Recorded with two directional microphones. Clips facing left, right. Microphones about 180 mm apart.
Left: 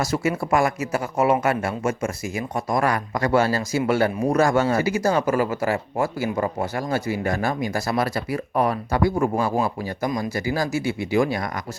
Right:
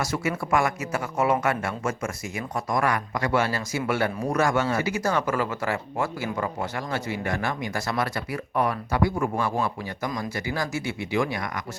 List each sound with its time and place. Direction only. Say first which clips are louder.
0.0 s a man's voice: left 4 dB; 30° left (ahead or behind)
8.9 s a man's voice: left 4 dB; 40° left (ahead or behind)
10.7 s speech: left 6 dB; 25° right (ahead or behind)